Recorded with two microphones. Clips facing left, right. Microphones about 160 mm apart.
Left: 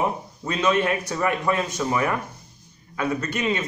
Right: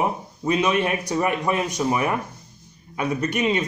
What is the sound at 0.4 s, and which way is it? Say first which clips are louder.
A man's voice: right 1 dB; 15° right (ahead or behind).